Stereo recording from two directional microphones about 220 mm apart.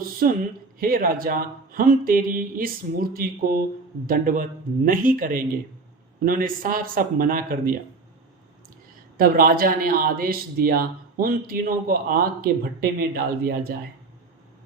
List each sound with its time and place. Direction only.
0.8 s speech: 40° right (ahead or behind)
9.1 s speech: 40° right (ahead or behind)